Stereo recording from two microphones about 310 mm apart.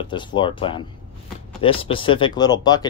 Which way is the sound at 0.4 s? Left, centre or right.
Centre.